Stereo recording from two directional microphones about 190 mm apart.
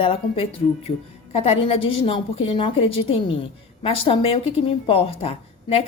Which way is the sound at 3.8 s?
30° left (ahead or behind).